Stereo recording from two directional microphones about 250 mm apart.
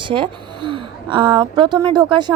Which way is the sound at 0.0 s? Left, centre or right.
Centre.